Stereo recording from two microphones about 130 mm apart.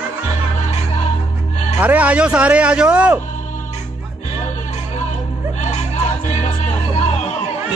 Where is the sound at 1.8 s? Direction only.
10° right (ahead or behind).